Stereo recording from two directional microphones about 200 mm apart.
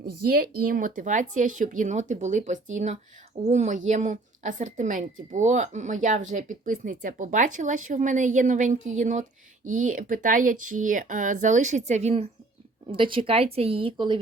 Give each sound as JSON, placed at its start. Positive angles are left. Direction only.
{"t": 0.0, "sound": "a woman's voice", "side_deg": -50}